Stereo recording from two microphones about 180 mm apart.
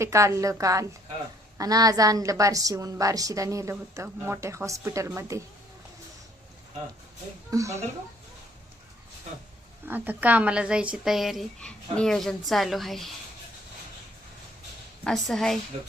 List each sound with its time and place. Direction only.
0.0 s a woman's voice: 15° right (ahead or behind)
7.5 s a woman's voice: 15° right (ahead or behind)
9.8 s speech: 10° right (ahead or behind)
15.0 s speech: centre (ahead or behind)
15.7 s speech: 35° right (ahead or behind)